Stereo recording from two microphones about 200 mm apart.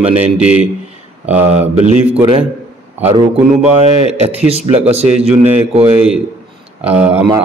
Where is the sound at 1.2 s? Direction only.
10° right (ahead or behind).